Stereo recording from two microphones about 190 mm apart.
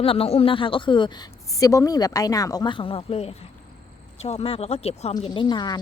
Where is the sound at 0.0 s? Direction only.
30° left (ahead or behind).